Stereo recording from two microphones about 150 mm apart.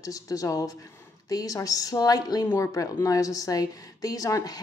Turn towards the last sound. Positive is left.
turn(degrees=25)  # may be behind; listen again after turning